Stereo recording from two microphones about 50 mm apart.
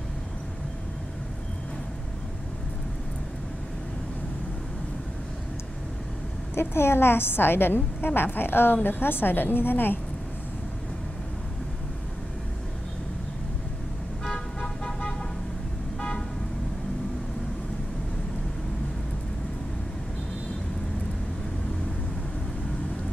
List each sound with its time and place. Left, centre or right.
6.5 s a woman's voice: left
14.2 s vehicle: centre